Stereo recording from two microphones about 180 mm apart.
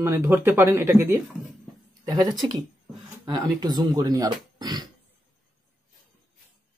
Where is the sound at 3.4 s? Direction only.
20° right (ahead or behind).